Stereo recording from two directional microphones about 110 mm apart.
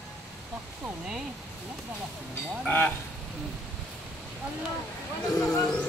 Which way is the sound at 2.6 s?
15° left (ahead or behind).